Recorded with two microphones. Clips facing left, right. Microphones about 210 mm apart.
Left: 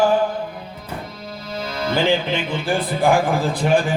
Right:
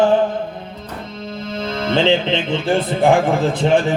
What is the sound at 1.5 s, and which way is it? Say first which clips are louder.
Speech: right 3 dB; 25° right (ahead or behind).